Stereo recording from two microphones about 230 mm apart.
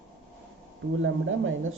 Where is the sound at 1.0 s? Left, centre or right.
Right.